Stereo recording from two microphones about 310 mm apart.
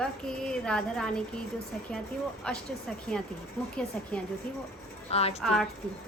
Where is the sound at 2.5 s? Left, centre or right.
Centre.